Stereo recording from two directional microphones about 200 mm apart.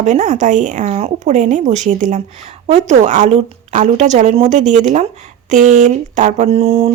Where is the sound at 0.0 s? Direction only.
35° right (ahead or behind).